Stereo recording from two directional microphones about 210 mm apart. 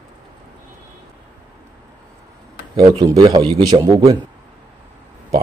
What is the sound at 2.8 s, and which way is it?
A man's voice, 25° right (ahead or behind).